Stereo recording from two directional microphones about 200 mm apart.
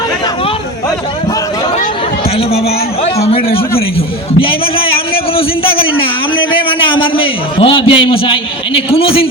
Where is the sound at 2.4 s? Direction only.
30° left (ahead or behind).